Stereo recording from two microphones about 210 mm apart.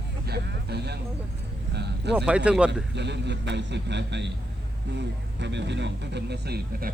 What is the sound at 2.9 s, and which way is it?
A man's voice, 55° right (ahead or behind).